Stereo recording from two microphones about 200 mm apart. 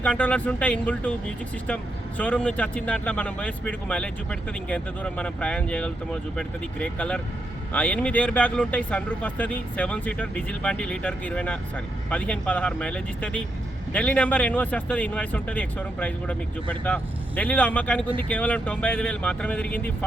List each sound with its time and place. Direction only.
0.0 s speech: 5° left (ahead or behind)